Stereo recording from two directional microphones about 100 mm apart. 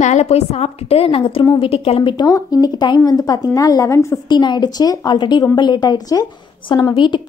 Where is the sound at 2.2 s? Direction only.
35° left (ahead or behind).